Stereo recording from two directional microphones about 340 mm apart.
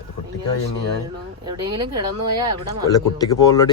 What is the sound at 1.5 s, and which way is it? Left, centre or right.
Speech, centre.